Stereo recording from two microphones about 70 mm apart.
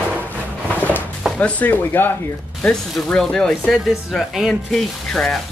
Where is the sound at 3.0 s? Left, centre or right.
Centre.